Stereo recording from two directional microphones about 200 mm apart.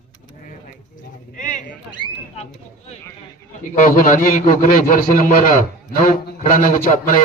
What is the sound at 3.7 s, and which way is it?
A man's voice, 40° left (ahead or behind).